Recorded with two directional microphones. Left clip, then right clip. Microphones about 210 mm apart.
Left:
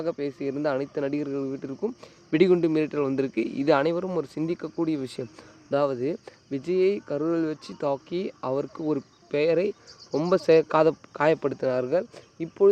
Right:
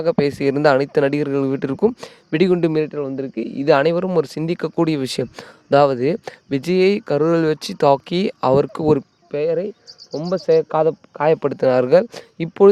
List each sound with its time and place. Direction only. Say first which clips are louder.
0.0 s speech: right 11 dB; 45° right (ahead or behind)
2.3 s speech: right 4 dB; 25° right (ahead or behind)
2.9 s speech: right 1 dB; 10° right (ahead or behind)
3.3 s speech: right 9 dB; 25° right (ahead or behind); by 9.0 s 45° right (ahead or behind)
9.3 s speech: right 3 dB; 20° right (ahead or behind)
11.3 s speech: right 9 dB; 35° right (ahead or behind); by 12.6 s 55° right (ahead or behind)